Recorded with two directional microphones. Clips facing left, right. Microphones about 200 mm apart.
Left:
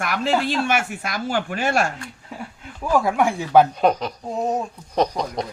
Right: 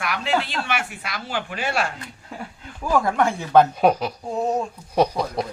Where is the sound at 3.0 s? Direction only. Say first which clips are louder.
Left 1 dB; 10° left (ahead or behind).